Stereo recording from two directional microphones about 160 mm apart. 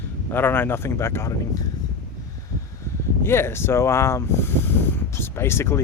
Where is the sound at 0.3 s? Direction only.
15° left (ahead or behind).